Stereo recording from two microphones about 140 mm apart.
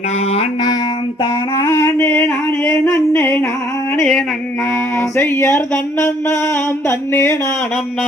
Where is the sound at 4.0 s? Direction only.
Centre (ahead or behind).